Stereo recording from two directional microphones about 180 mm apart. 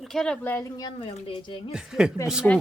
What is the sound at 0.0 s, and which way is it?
Speech, centre (ahead or behind).